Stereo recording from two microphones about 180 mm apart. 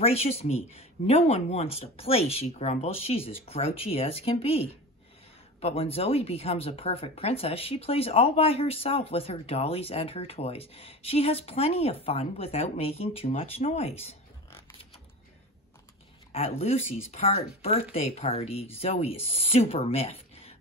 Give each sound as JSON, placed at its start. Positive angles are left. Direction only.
{"t": 0.0, "sound": "speech", "side_deg": 35}
{"t": 16.3, "sound": "speech", "side_deg": 35}